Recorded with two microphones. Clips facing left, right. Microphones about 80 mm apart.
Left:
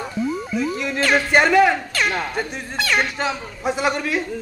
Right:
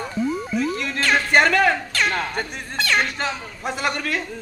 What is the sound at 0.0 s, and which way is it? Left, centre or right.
Speech, centre.